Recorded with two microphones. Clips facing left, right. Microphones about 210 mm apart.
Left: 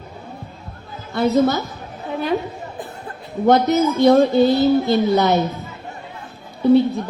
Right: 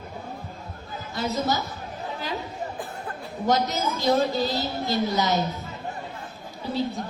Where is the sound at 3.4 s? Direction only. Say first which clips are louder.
Left 9 dB; 60° left (ahead or behind).